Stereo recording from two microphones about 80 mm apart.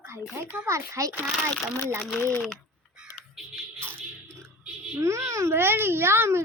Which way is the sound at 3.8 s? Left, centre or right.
Right.